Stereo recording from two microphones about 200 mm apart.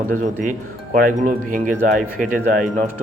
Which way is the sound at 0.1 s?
40° right (ahead or behind).